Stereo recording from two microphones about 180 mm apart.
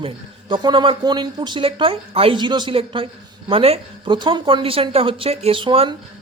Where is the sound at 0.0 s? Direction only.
25° right (ahead or behind).